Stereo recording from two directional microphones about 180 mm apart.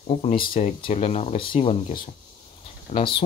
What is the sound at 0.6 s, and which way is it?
Speech, 35° left (ahead or behind).